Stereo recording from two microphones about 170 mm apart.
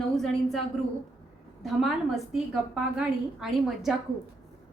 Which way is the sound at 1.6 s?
Centre (ahead or behind).